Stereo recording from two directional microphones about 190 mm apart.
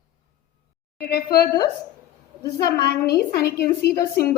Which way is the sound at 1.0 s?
55° left (ahead or behind).